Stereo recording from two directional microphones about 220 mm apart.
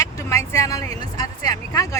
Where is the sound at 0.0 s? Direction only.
15° left (ahead or behind).